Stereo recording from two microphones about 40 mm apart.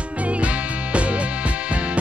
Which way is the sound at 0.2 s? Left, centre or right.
Right.